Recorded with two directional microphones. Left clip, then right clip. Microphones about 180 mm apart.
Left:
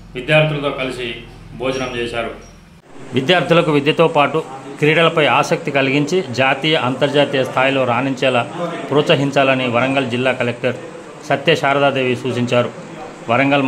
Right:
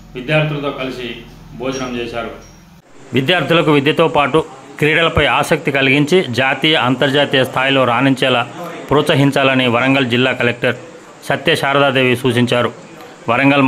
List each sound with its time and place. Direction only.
0.1 s a man's voice: 15° left (ahead or behind)
3.2 s a man's voice: 15° right (ahead or behind)